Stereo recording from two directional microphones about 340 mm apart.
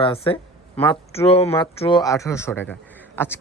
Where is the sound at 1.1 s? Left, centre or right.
Centre.